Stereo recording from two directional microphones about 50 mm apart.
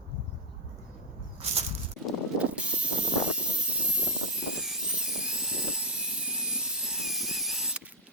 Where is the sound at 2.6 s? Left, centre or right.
Right.